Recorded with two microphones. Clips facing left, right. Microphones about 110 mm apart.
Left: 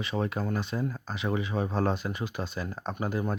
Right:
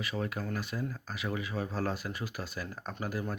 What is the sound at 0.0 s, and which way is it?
Speech, 25° left (ahead or behind).